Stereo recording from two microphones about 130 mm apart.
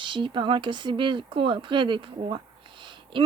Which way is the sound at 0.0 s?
40° right (ahead or behind).